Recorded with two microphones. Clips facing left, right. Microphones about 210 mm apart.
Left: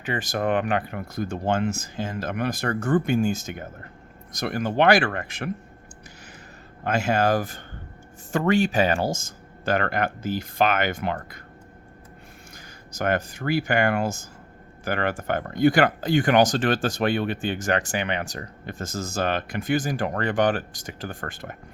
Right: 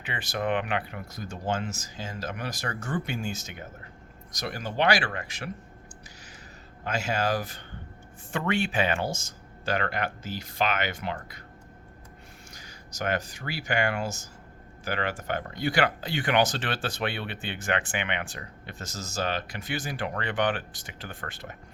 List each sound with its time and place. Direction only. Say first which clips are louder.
0.0 s speech: left 5 dB; 45° left (ahead or behind)
6.8 s speech: left 6 dB; 55° left (ahead or behind)
9.6 s speech: left 5 dB; 50° left (ahead or behind)
12.5 s speech: left 5 dB; 55° left (ahead or behind)